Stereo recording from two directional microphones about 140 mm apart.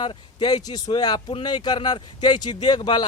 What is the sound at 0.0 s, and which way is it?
Speech, 35° left (ahead or behind).